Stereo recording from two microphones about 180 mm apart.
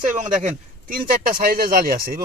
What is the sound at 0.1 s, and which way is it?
Speech, 45° right (ahead or behind).